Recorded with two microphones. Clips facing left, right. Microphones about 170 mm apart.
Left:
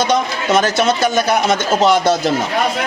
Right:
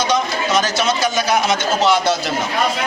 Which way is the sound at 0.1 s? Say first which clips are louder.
Left 3 dB; 55° left (ahead or behind).